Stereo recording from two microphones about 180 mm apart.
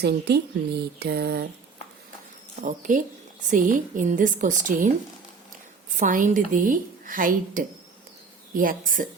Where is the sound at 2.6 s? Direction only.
45° right (ahead or behind).